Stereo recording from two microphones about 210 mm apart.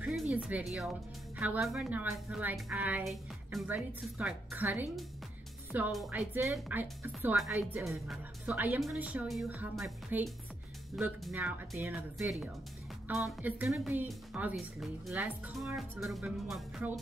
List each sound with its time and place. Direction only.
0.0 s speech: 5° right (ahead or behind)